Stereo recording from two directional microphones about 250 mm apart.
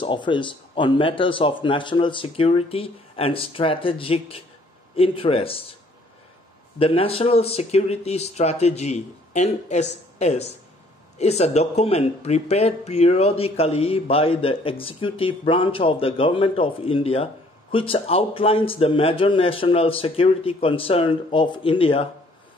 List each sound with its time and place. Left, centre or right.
0.0 s speech: centre
6.8 s speech: left